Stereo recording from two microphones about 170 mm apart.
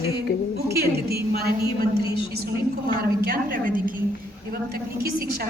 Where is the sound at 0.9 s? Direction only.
65° right (ahead or behind).